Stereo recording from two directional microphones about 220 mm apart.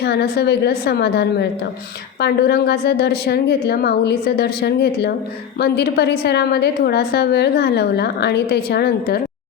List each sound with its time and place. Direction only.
0.0 s a woman's voice: 50° left (ahead or behind)